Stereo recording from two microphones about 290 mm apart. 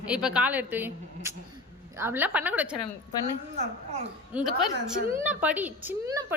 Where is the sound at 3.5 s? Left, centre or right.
Right.